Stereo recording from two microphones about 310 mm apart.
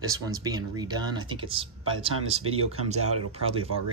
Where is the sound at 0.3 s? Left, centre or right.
Centre.